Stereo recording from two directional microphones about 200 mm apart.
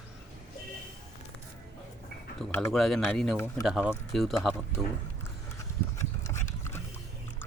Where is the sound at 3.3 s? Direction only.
10° left (ahead or behind).